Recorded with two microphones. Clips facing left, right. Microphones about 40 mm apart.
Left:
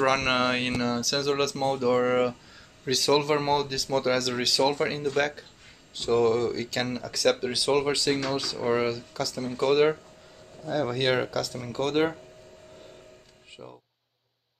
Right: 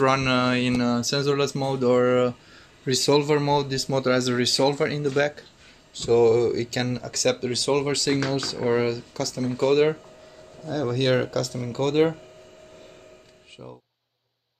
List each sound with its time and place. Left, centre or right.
0.0 s speech: centre
10.6 s speech: centre